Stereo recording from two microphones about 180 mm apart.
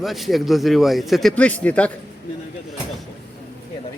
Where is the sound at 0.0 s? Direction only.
Centre (ahead or behind).